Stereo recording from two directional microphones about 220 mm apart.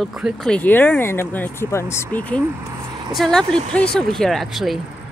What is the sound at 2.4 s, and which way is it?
Vehicle, 15° right (ahead or behind).